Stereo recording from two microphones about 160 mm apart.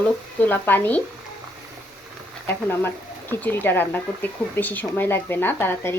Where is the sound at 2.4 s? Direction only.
15° left (ahead or behind).